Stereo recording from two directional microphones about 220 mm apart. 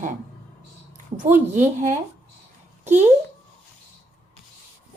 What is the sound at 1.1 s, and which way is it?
Speech, 35° right (ahead or behind).